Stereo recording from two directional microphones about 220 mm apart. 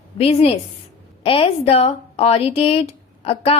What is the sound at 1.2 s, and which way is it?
A woman's voice, 25° left (ahead or behind).